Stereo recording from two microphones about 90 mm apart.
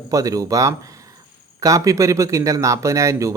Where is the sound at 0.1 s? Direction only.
40° right (ahead or behind).